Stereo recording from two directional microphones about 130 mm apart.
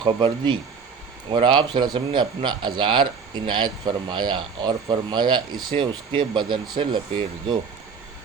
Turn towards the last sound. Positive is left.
turn(degrees=-40)  # may be behind; listen again after turning